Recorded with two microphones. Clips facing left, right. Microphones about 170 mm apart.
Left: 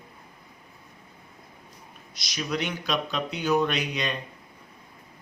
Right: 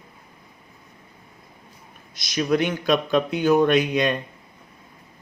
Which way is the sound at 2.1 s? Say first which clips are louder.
Right 9 dB; 50° right (ahead or behind).